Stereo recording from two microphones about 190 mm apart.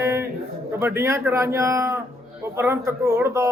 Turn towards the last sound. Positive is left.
turn(degrees=-15)  # may be behind; listen again after turning